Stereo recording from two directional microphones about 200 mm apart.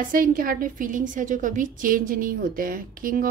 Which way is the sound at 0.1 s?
45° right (ahead or behind).